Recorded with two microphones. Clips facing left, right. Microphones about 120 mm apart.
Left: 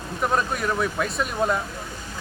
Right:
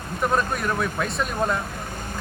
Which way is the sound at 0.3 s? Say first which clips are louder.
Left 1 dB; centre (ahead or behind).